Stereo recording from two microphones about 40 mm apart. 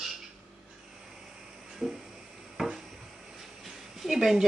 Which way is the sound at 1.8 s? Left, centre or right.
Centre.